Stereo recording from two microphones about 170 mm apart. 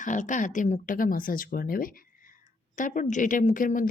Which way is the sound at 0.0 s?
50° left (ahead or behind).